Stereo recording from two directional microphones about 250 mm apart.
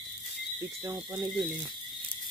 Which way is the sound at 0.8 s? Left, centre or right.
Centre.